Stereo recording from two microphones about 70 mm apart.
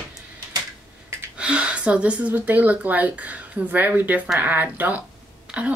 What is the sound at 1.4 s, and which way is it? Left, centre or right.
Speech, centre.